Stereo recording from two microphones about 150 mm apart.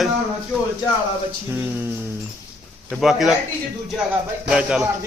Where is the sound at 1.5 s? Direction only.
15° right (ahead or behind).